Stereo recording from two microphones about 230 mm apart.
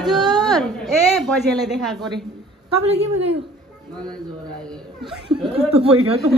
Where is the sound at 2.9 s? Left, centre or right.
Right.